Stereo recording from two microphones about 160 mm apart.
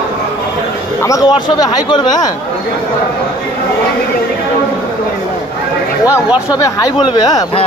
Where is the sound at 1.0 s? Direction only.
20° left (ahead or behind).